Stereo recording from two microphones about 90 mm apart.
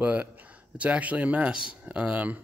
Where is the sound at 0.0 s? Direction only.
15° right (ahead or behind).